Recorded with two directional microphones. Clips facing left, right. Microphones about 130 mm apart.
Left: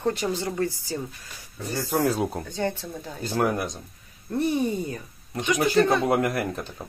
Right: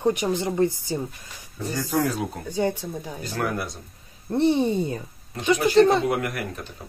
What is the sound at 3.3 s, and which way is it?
Speech, 20° left (ahead or behind).